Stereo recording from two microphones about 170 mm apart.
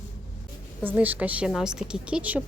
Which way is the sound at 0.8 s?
10° right (ahead or behind).